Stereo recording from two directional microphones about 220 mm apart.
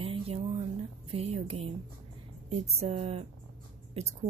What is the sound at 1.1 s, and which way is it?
Speech, 30° right (ahead or behind).